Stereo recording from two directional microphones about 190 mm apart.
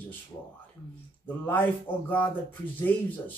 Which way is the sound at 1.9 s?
10° left (ahead or behind).